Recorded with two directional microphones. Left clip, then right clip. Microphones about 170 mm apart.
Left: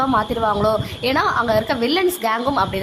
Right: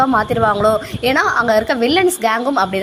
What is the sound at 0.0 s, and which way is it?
A woman's voice, 15° right (ahead or behind).